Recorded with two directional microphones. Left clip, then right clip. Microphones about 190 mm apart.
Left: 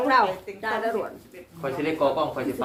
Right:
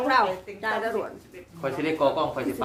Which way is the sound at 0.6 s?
35° right (ahead or behind).